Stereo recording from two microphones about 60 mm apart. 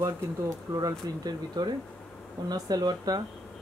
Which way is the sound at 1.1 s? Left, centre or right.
Right.